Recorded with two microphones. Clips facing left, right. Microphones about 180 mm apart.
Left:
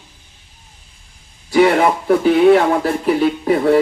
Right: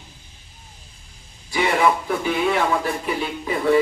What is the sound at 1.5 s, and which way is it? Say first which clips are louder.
Speech: left 7 dB; 60° left (ahead or behind).